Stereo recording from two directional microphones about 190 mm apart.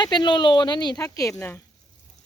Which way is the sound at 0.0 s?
20° left (ahead or behind).